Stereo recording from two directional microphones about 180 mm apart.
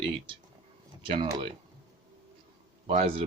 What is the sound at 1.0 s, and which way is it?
Speech, 30° right (ahead or behind).